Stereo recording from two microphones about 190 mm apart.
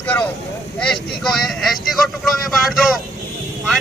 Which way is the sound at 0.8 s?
5° left (ahead or behind).